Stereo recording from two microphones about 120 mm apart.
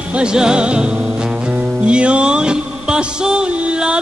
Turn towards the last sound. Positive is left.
turn(degrees=-10)  # may be behind; listen again after turning